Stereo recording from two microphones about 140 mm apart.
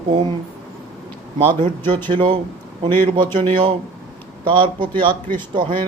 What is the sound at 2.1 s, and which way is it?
Speech, 35° right (ahead or behind).